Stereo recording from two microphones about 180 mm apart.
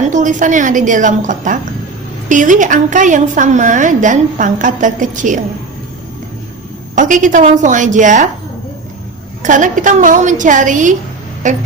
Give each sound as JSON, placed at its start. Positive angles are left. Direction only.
{"t": 0.0, "sound": "a woman's voice", "side_deg": -45}
{"t": 6.9, "sound": "a woman's voice", "side_deg": -45}
{"t": 9.4, "sound": "a woman's voice", "side_deg": -45}